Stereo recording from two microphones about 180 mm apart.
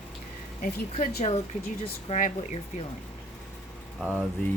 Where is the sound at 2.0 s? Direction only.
40° left (ahead or behind).